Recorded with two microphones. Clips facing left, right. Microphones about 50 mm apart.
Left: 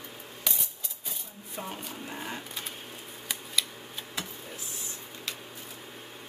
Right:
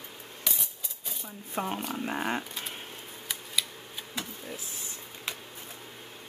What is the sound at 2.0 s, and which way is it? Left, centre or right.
Speech, right.